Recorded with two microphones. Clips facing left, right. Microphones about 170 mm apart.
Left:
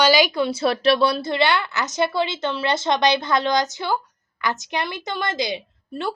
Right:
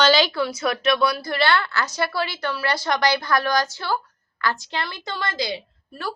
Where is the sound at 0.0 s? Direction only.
15° left (ahead or behind).